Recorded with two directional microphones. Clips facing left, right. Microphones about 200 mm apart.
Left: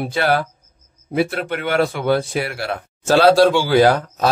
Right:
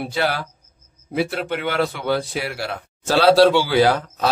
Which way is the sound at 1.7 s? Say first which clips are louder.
Left 5 dB; 50° left (ahead or behind).